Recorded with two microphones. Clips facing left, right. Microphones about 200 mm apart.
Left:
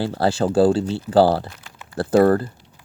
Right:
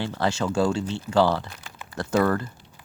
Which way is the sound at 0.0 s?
35° left (ahead or behind).